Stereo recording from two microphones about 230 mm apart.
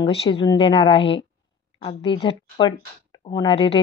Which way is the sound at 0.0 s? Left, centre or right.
Left.